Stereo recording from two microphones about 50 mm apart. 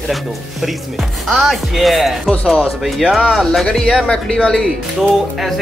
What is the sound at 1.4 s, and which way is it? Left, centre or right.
Speech, centre.